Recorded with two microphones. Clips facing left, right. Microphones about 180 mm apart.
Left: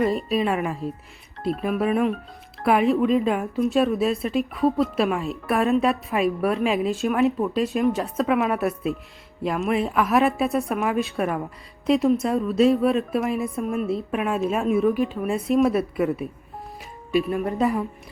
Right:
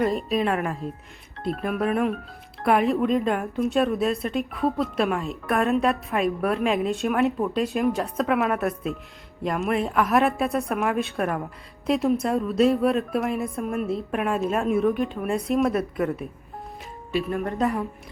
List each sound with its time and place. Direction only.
0.0 s a woman's voice: centre (ahead or behind)
17.1 s speech: 15° left (ahead or behind)
17.3 s a woman's voice: centre (ahead or behind)